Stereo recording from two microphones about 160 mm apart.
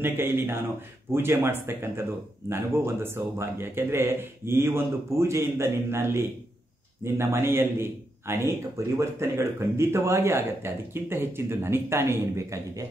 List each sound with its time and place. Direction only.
0.0 s a man's voice: 15° right (ahead or behind)